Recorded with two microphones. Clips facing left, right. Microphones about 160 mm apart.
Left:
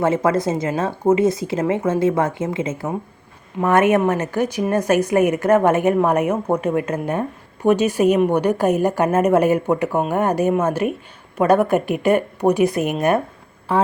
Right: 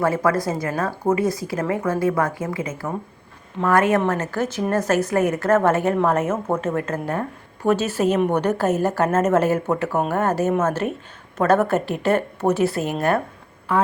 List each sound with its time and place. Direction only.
0.0 s a woman's voice: 25° left (ahead or behind)
13.7 s a woman's voice: 30° left (ahead or behind)